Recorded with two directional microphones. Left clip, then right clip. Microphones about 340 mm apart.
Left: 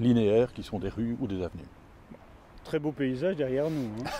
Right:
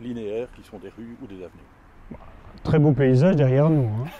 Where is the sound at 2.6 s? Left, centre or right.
Right.